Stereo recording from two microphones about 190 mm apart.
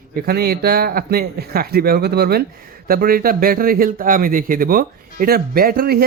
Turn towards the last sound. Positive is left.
turn(degrees=-50)  # may be behind; listen again after turning